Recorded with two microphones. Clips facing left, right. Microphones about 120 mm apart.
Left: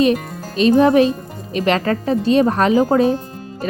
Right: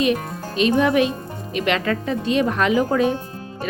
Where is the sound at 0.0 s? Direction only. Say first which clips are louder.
Left 4 dB; 35° left (ahead or behind).